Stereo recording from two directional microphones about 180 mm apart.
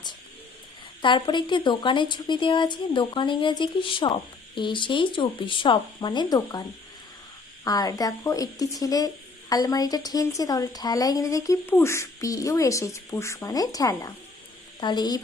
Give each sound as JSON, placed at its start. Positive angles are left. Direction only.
{"t": 1.0, "sound": "speech", "side_deg": 25}